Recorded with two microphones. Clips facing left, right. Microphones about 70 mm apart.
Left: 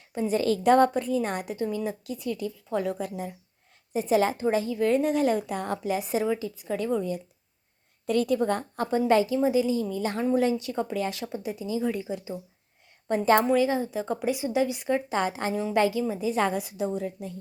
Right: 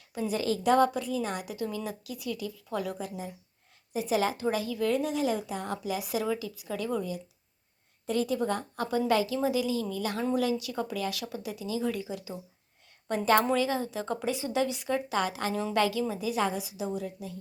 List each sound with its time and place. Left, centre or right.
0.1 s a woman's voice: left
1.6 s a woman's voice: left
3.0 s a woman's voice: left
8.0 s a woman's voice: left
8.4 s a woman's voice: left
16.4 s a woman's voice: left